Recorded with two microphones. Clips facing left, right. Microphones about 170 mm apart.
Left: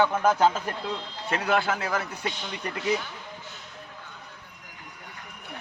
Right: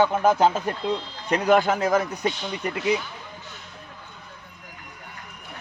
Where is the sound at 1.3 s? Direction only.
40° right (ahead or behind).